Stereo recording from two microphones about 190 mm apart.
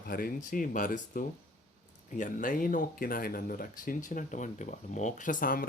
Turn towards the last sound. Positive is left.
turn(degrees=45)  # may be behind; listen again after turning